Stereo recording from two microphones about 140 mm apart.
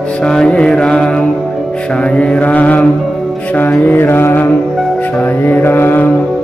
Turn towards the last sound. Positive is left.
turn(degrees=15)  # may be behind; listen again after turning